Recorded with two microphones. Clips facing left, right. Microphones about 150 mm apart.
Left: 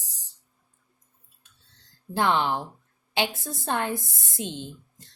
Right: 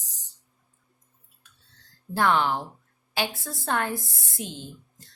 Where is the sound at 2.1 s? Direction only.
20° left (ahead or behind).